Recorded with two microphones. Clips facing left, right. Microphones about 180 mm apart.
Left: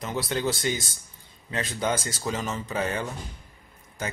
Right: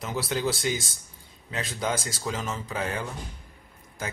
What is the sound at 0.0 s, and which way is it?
Speech, 5° right (ahead or behind).